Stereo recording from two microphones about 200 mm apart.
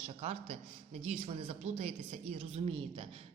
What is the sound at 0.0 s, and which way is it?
A woman's voice, 30° right (ahead or behind).